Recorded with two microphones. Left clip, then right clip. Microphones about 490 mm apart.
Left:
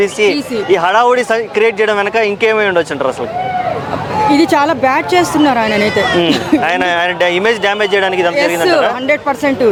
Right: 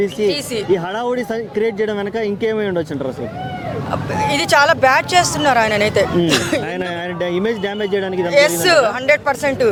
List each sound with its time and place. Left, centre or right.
0.7 s speech: left
4.3 s speech: right
6.7 s speech: left
8.4 s speech: right